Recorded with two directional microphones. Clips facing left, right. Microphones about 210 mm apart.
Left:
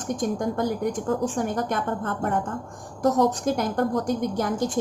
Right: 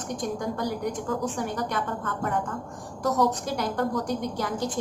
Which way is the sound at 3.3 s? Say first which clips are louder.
Left 4 dB; 45° left (ahead or behind).